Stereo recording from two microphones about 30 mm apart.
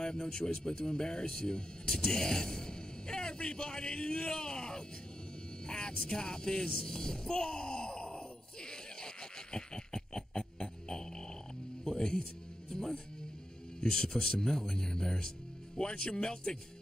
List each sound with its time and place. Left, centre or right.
0.0 s a man's voice: left
8.6 s laughter: left
11.8 s music: left
13.7 s speech: centre